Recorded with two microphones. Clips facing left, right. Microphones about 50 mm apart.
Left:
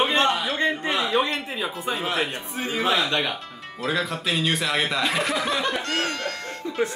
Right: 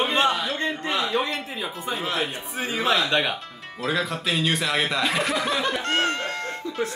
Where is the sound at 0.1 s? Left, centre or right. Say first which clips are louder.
Even; centre.